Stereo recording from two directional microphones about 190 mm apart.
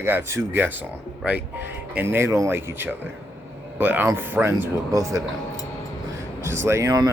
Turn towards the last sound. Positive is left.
turn(degrees=-20)  # may be behind; listen again after turning